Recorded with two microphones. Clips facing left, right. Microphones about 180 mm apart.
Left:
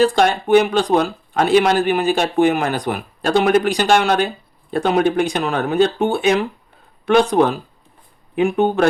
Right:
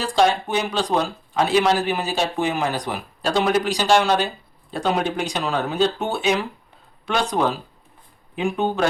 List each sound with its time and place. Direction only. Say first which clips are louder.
0.0 s speech: left 4 dB; 60° left (ahead or behind)